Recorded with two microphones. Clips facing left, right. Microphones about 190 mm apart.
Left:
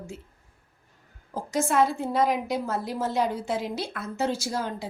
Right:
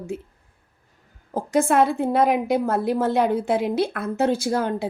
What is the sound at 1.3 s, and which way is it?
A woman's voice, 55° right (ahead or behind).